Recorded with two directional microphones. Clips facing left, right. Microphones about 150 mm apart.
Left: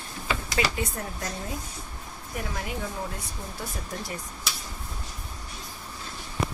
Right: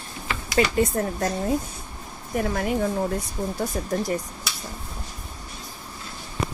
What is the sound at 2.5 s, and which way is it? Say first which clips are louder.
Speech: right 9 dB; 55° right (ahead or behind).